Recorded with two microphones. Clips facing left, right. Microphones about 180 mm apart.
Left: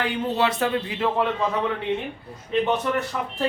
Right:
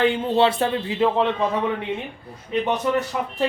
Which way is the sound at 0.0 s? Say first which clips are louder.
Right 5 dB; 25° right (ahead or behind).